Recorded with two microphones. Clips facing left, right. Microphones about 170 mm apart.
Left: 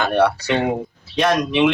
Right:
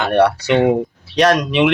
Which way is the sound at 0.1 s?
75° right (ahead or behind).